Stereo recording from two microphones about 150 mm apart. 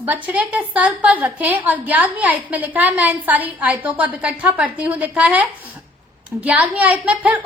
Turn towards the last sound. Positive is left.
turn(degrees=-10)  # may be behind; listen again after turning